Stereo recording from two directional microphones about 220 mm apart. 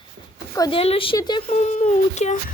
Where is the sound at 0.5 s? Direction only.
20° left (ahead or behind).